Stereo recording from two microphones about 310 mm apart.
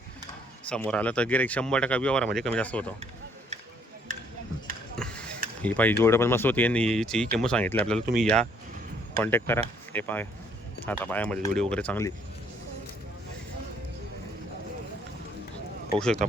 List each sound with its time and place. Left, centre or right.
0.7 s speech: centre
4.1 s a sound: right
4.9 s basketball bounce: centre
5.6 s speech: centre
15.9 s speech: centre